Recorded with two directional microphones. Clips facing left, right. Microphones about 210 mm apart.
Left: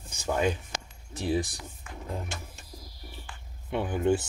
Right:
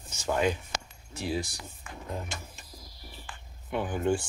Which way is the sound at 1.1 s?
20° left (ahead or behind).